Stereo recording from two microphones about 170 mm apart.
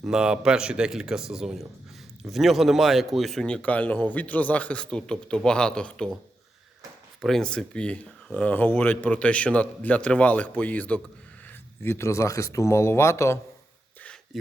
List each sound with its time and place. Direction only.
0.0 s a man's voice: 5° right (ahead or behind)
7.2 s speech: centre (ahead or behind)